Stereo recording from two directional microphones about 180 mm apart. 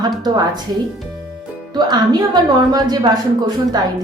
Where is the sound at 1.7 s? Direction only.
25° right (ahead or behind).